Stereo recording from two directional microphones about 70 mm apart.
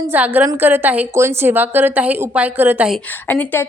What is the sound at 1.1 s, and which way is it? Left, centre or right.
Speech, right.